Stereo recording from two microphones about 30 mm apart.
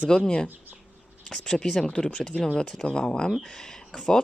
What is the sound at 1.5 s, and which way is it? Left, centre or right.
Speech, left.